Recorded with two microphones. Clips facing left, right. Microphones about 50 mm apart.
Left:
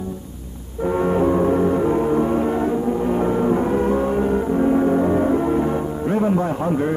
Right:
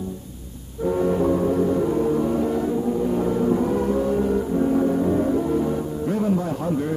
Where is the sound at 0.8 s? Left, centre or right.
Left.